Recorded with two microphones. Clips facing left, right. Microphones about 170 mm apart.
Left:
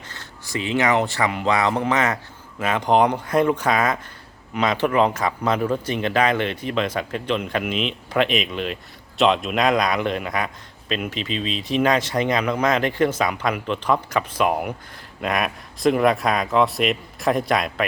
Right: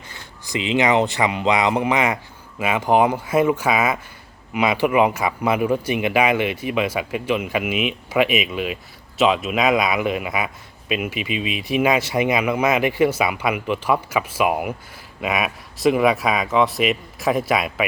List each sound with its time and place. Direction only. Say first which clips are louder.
0.1 s speech: right 2 dB; 15° right (ahead or behind)